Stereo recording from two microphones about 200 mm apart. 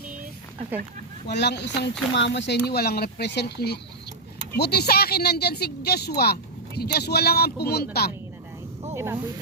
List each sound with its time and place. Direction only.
1.3 s speech: 60° left (ahead or behind)
2.6 s speech: 50° left (ahead or behind)
9.0 s speech: 10° right (ahead or behind)